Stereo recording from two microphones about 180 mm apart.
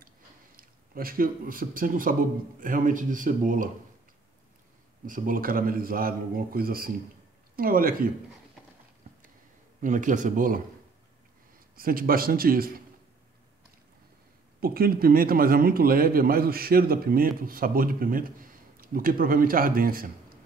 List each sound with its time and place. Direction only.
0.6 s a man's voice: 55° right (ahead or behind)
5.0 s a man's voice: 50° right (ahead or behind)
9.8 s a man's voice: 45° right (ahead or behind)
11.7 s a man's voice: 55° right (ahead or behind)
14.6 s a man's voice: 55° right (ahead or behind)